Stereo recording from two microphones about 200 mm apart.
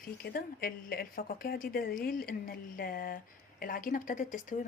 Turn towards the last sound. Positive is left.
turn(degrees=40)  # may be behind; listen again after turning